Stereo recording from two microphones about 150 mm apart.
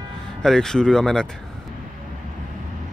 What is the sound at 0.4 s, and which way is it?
Speech, 5° left (ahead or behind).